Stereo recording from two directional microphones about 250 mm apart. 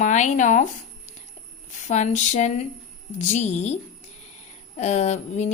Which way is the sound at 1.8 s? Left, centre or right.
Left.